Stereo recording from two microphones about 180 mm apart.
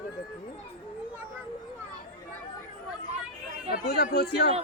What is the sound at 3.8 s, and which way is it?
Speech, 65° left (ahead or behind).